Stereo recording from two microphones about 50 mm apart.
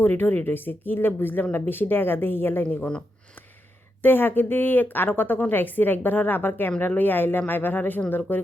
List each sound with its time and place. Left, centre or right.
0.0 s speech: left
4.0 s a woman's voice: left